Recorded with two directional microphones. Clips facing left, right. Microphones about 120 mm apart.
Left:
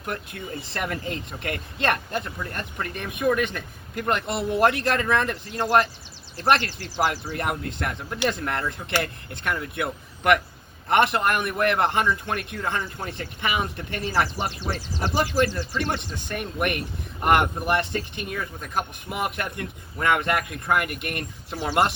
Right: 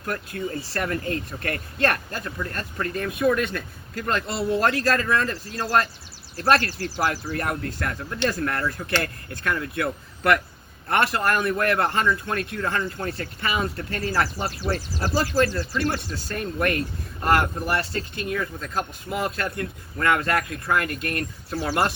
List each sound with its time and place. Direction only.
0.0 s speech: 20° left (ahead or behind)